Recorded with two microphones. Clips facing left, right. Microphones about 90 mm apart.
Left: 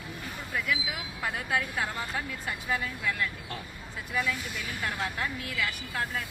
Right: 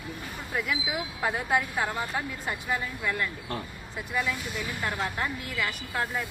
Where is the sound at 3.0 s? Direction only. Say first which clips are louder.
Right 1 dB; 35° right (ahead or behind).